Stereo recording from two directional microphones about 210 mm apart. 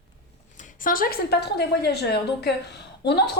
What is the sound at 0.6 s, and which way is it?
A woman's voice, 40° left (ahead or behind).